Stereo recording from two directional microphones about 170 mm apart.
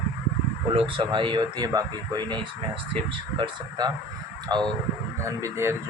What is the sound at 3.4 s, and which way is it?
A man's voice, 25° right (ahead or behind).